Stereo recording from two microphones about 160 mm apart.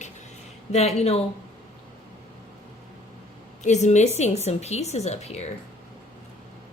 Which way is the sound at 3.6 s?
45° left (ahead or behind).